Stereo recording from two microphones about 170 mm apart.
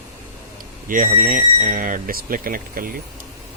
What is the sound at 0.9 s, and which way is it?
Speech, 50° right (ahead or behind).